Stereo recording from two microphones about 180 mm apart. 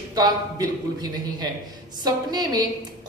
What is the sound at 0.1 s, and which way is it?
A man's voice, 20° right (ahead or behind).